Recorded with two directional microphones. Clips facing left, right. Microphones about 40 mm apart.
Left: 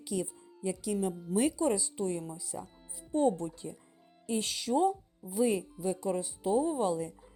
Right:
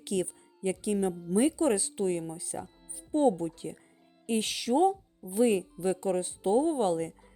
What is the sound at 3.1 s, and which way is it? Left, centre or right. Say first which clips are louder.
A woman's voice: right 3 dB; right.